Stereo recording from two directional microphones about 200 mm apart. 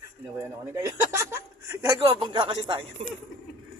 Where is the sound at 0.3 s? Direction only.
15° right (ahead or behind).